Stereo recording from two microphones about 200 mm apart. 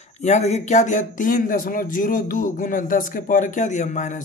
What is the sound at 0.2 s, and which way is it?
Speech, 35° left (ahead or behind).